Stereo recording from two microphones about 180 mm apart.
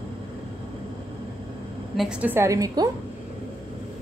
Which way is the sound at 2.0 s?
5° right (ahead or behind).